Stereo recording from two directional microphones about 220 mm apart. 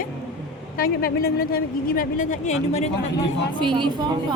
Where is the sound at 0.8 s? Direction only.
45° left (ahead or behind).